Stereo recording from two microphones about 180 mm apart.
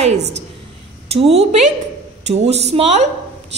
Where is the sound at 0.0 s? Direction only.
35° right (ahead or behind).